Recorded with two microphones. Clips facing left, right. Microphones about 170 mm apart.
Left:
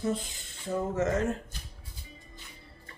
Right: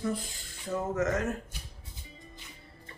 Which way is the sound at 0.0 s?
25° left (ahead or behind).